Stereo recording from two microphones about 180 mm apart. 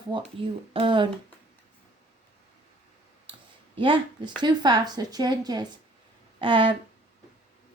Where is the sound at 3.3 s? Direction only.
30° right (ahead or behind).